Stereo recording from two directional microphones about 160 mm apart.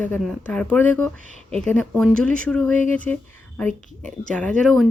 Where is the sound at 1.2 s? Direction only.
45° right (ahead or behind).